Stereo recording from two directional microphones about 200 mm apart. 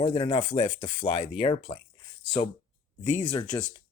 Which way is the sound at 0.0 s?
25° left (ahead or behind).